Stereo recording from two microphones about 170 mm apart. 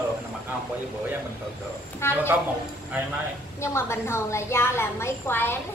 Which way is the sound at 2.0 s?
15° left (ahead or behind).